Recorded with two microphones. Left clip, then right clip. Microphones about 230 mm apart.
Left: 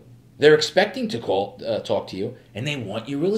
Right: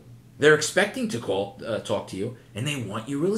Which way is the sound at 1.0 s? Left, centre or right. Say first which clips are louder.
Left 4 dB; left.